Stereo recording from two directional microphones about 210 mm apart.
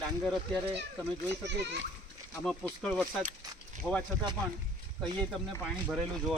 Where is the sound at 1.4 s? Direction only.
55° right (ahead or behind).